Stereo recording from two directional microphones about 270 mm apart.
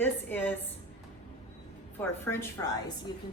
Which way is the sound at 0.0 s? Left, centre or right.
Centre.